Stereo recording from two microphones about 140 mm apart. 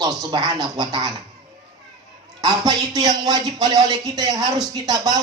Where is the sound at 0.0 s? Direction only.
30° right (ahead or behind).